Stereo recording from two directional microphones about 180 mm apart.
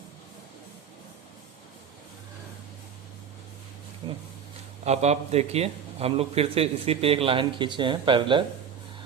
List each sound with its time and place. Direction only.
4.9 s a man's voice: 35° right (ahead or behind)